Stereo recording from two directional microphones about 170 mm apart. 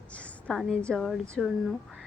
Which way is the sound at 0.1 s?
5° left (ahead or behind).